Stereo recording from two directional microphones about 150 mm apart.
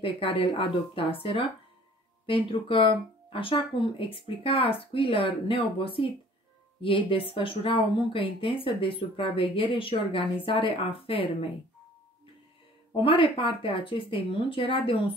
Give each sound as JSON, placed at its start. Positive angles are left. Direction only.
{"t": 0.0, "sound": "speech", "side_deg": 35}
{"t": 12.9, "sound": "speech", "side_deg": 35}